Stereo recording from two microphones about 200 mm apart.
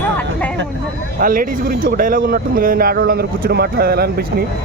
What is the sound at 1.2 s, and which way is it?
Speech, 45° right (ahead or behind).